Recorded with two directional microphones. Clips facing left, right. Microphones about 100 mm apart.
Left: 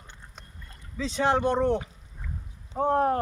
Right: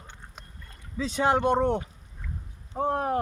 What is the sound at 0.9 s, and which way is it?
Speech, 20° right (ahead or behind).